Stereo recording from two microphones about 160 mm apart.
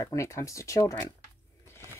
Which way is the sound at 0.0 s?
20° left (ahead or behind).